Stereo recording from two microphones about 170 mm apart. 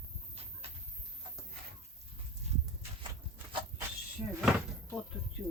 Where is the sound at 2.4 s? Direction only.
40° right (ahead or behind).